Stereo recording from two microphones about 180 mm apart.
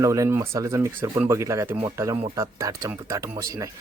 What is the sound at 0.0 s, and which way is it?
Speech, 15° right (ahead or behind).